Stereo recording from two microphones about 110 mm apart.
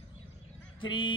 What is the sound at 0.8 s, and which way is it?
Speech, 50° left (ahead or behind).